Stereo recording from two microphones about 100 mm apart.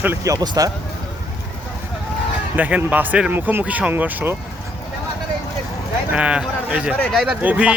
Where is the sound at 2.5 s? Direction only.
15° right (ahead or behind).